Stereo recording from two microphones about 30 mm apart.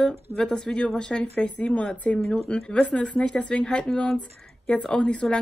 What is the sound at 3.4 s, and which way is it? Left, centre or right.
Speech, left.